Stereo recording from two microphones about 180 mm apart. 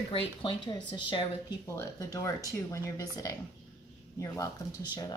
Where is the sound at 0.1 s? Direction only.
30° left (ahead or behind).